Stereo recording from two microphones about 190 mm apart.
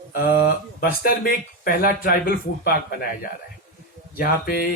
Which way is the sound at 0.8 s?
50° left (ahead or behind).